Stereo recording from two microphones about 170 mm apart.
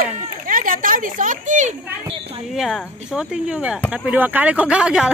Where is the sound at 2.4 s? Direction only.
Centre (ahead or behind).